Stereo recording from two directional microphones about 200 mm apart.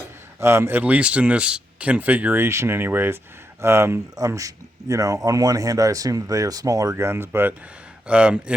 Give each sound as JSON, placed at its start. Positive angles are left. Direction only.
{"t": 0.3, "sound": "speech", "side_deg": -15}